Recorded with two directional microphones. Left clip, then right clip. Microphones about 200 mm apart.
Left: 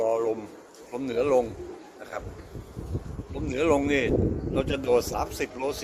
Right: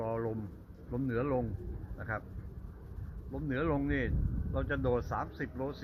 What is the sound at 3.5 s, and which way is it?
A man's voice, 15° left (ahead or behind).